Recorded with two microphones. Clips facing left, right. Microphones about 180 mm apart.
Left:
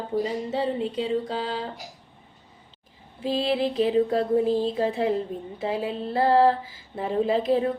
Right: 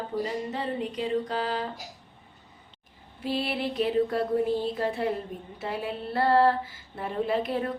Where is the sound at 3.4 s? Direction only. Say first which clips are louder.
Left 7 dB; 90° left.